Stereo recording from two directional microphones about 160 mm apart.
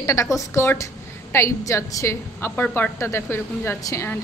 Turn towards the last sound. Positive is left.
turn(degrees=15)  # may be behind; listen again after turning